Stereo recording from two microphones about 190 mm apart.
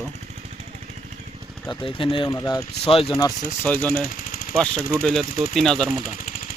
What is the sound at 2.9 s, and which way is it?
Speech, 30° left (ahead or behind).